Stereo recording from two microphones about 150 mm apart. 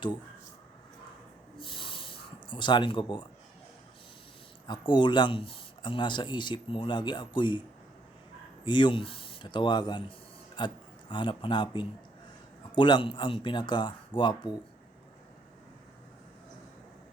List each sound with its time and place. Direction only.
1.5 s a sound: 35° left (ahead or behind)
4.6 s speech: 30° left (ahead or behind)
8.6 s speech: 30° left (ahead or behind)